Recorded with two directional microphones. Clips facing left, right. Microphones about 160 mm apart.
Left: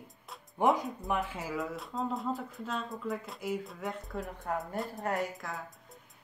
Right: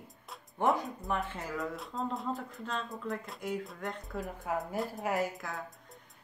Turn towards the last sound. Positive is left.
turn(degrees=0)  # may be behind; listen again after turning